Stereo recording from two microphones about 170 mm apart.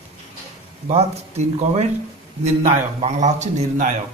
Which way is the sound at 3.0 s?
45° right (ahead or behind).